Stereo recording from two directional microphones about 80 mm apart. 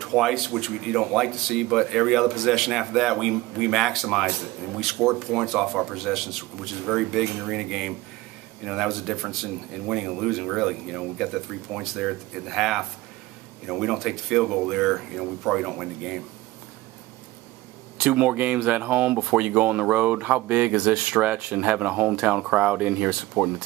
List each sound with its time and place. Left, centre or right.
0.0 s speech: centre
17.9 s speech: centre